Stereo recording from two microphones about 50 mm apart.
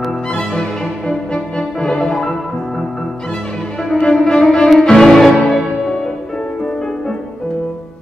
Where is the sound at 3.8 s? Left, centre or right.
Centre.